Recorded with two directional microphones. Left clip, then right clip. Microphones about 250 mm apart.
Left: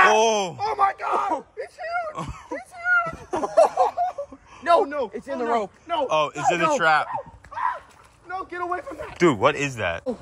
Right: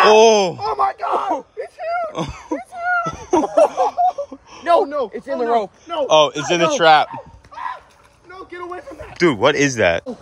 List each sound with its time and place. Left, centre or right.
0.1 s speech: centre
0.6 s speech: right
1.6 s a sound: right
2.1 s speech: centre
2.5 s a sound: right
3.9 s wheeze: centre
4.8 s speech: right
5.1 s speech: right
5.9 s speech: centre
8.3 s boat: centre
8.7 s speech: centre